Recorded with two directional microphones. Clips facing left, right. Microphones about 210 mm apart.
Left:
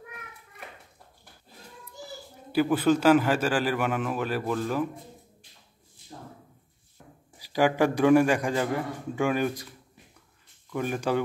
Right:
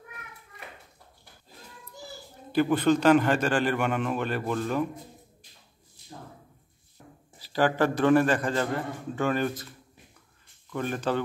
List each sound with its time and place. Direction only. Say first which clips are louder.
2.5 s a man's voice: even; 5° left (ahead or behind)
7.3 s a man's voice: left 1 dB; 10° left (ahead or behind)
10.7 s a man's voice: left 1 dB; 10° left (ahead or behind)